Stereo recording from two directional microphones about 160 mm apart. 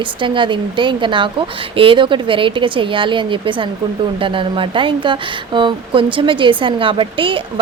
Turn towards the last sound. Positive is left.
turn(degrees=-35)  # may be behind; listen again after turning